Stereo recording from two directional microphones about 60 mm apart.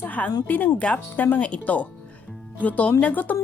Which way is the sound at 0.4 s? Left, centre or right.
Left.